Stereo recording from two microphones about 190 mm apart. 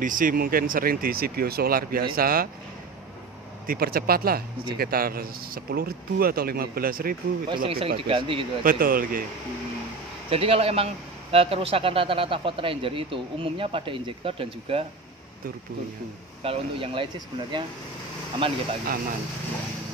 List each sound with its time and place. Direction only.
0.0 s speech: 45° right (ahead or behind)
3.6 s speech: 50° right (ahead or behind)
7.4 s speech: 25° right (ahead or behind)
8.6 s speech: 50° right (ahead or behind)
10.3 s speech: 30° right (ahead or behind)
16.4 s speech: 30° right (ahead or behind)